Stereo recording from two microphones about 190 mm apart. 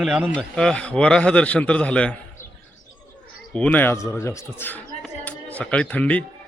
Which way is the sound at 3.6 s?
10° left (ahead or behind).